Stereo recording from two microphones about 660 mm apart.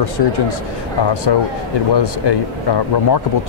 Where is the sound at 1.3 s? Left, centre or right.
Left.